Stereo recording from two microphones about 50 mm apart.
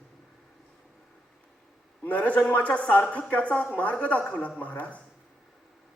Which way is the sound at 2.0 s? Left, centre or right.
Left.